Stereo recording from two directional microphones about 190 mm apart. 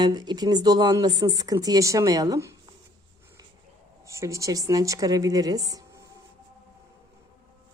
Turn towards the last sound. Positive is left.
turn(degrees=-20)  # may be behind; listen again after turning